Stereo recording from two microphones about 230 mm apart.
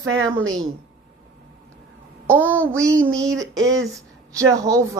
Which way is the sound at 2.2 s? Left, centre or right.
Centre.